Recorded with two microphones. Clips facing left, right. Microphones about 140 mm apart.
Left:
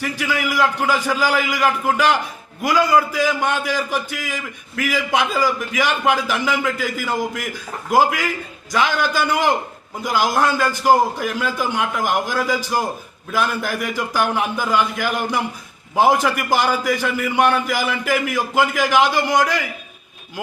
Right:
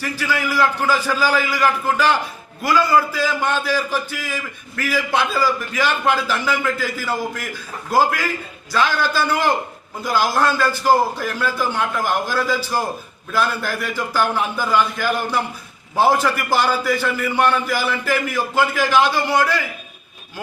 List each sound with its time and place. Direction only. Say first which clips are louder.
0.0 s a man's voice: even; 15° left (ahead or behind)